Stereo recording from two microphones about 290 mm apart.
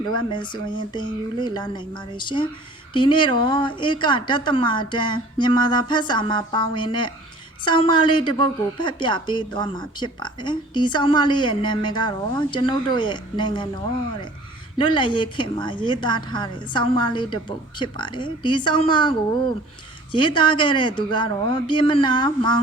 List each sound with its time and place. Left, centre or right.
0.1 s a woman's voice: centre
14.8 s a woman's voice: centre